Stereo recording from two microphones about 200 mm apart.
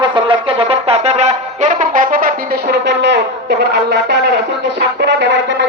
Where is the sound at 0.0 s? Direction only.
25° right (ahead or behind).